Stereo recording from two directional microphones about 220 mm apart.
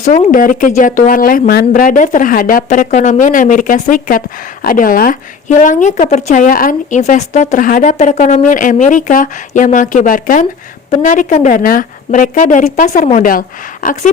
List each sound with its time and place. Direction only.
0.0 s speech: 35° left (ahead or behind)